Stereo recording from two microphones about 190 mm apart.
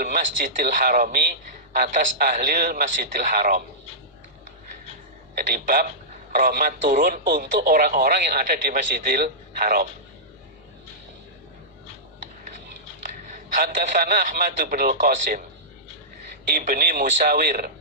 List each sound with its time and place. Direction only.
0.0 s a man's voice: 45° right (ahead or behind)
5.4 s a man's voice: 45° right (ahead or behind)
13.6 s a man's voice: 40° right (ahead or behind)
16.5 s a man's voice: 50° right (ahead or behind)